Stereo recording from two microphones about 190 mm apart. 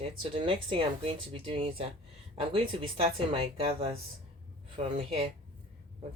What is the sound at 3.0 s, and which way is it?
Speech, 30° right (ahead or behind).